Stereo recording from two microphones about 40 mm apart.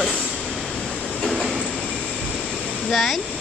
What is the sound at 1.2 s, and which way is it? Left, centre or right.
Train, centre.